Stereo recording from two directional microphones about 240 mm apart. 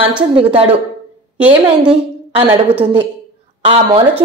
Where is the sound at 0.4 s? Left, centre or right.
Right.